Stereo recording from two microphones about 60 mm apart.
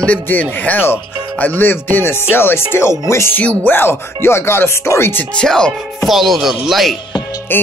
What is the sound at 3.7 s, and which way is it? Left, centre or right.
Speech, left.